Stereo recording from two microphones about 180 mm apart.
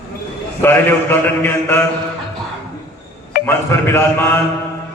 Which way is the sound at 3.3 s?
55° left (ahead or behind).